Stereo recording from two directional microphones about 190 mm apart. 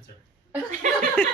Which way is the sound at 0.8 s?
40° right (ahead or behind).